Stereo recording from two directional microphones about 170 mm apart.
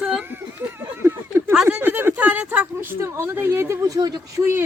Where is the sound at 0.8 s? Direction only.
15° right (ahead or behind).